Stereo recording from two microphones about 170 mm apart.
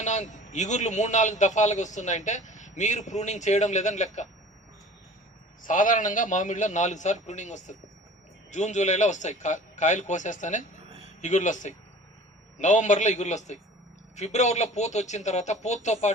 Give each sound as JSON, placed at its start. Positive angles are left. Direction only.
{"t": 0.0, "sound": "a man's voice", "side_deg": 45}
{"t": 5.6, "sound": "a man's voice", "side_deg": 50}